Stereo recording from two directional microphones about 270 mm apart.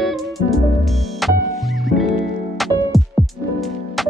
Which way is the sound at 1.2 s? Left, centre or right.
Centre.